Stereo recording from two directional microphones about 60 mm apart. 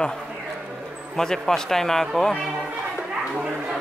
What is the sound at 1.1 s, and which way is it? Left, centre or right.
Speech, centre.